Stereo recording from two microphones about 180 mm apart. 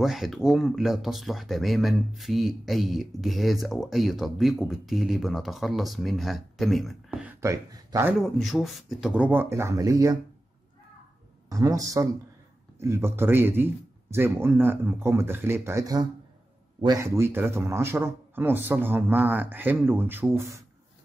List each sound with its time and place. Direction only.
0.0 s speech: centre (ahead or behind)
8.2 s a man's voice: centre (ahead or behind); by 10.1 s 20° right (ahead or behind)
11.5 s a man's voice: 20° right (ahead or behind)